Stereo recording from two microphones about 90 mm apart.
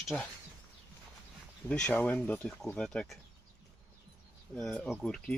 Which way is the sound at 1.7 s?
15° left (ahead or behind).